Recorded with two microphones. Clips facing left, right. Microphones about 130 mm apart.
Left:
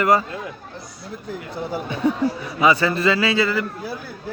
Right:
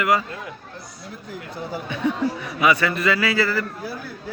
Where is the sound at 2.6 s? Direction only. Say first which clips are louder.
Left 2 dB; 30° left (ahead or behind).